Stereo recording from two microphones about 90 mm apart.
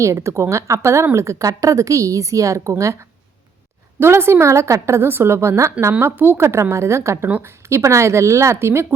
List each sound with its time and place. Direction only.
0.0 s a woman's voice: 35° right (ahead or behind)
4.0 s a woman's voice: 30° right (ahead or behind)
7.3 s a woman's voice: 20° right (ahead or behind)
7.7 s a woman's voice: 35° right (ahead or behind)